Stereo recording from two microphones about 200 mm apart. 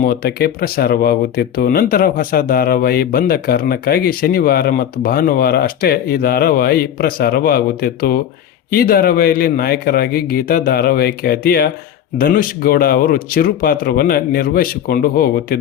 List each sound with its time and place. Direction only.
0.0 s speech: 50° left (ahead or behind)